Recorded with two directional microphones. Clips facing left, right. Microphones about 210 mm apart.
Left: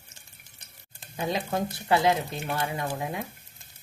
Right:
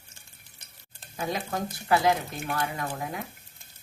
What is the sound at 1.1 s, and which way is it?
Speech, 25° left (ahead or behind).